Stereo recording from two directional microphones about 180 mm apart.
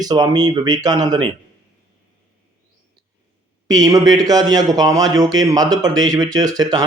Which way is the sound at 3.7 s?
20° right (ahead or behind).